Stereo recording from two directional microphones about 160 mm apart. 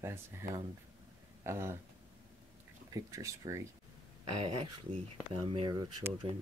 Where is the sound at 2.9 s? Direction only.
20° right (ahead or behind).